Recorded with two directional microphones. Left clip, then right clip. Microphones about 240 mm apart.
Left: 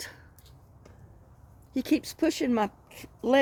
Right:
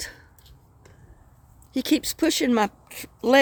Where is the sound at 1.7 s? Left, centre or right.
Right.